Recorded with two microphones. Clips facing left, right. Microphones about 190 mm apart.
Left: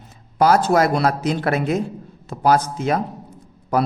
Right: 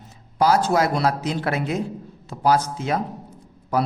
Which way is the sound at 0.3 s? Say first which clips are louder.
Left 3 dB; 55° left (ahead or behind).